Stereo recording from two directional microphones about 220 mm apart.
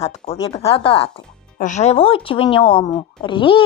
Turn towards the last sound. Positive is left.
turn(degrees=20)  # may be behind; listen again after turning